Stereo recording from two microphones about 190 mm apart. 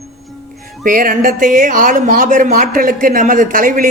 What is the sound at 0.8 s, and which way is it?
Speech, 45° right (ahead or behind).